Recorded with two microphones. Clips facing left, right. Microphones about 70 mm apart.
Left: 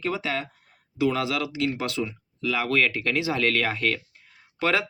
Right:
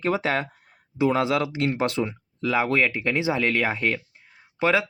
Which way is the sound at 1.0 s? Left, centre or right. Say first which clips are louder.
Right 3 dB; right.